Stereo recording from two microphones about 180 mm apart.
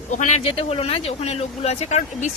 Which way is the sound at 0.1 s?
40° left (ahead or behind).